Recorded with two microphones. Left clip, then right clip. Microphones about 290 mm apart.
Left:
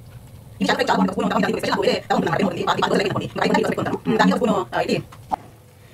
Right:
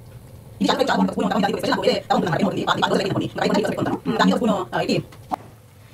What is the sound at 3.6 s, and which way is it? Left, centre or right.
A woman's voice, left.